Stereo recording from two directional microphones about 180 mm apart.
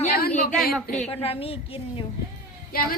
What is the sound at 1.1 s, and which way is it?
Speech, 35° left (ahead or behind).